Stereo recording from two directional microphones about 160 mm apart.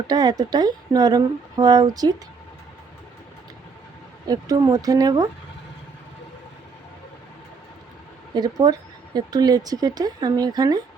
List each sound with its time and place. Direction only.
0.1 s speech: 25° right (ahead or behind)
4.3 s speech: 25° right (ahead or behind)
8.4 s speech: 25° right (ahead or behind)